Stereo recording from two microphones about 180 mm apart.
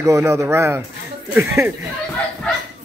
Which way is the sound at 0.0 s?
15° right (ahead or behind).